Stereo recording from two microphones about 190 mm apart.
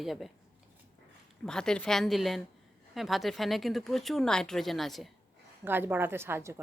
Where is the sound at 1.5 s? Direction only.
5° left (ahead or behind).